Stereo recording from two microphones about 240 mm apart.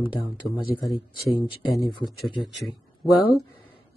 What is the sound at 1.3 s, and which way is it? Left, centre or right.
Speech, centre.